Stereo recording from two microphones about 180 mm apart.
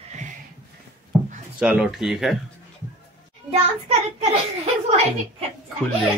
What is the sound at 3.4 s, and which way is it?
Speech, 35° right (ahead or behind).